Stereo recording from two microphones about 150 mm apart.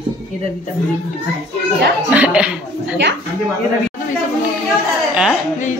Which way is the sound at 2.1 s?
10° right (ahead or behind).